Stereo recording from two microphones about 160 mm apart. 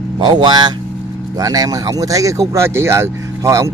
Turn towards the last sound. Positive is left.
turn(degrees=-20)  # may be behind; listen again after turning